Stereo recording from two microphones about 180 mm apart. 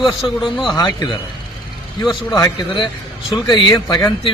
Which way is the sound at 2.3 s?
20° left (ahead or behind).